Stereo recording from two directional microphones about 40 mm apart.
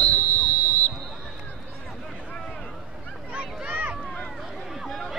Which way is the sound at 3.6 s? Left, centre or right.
Right.